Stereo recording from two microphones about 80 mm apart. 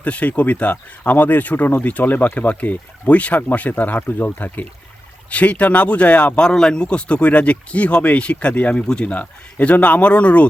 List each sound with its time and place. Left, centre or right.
0.0 s speech: centre